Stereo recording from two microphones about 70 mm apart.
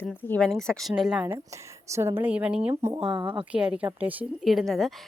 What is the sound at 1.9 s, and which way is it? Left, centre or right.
Speech, right.